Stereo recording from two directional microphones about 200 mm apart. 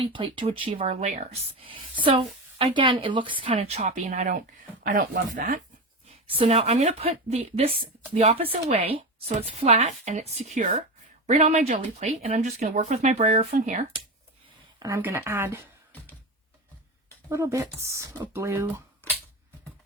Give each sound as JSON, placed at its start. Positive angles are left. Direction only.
{"t": 0.0, "sound": "a woman's voice", "side_deg": -25}
{"t": 6.2, "sound": "a woman's voice", "side_deg": -30}
{"t": 14.8, "sound": "speech", "side_deg": -15}
{"t": 17.2, "sound": "speech", "side_deg": -15}
{"t": 19.0, "sound": "a sound", "side_deg": 10}